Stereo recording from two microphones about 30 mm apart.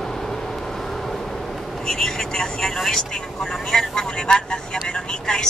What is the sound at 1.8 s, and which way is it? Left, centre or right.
Vehicle, centre.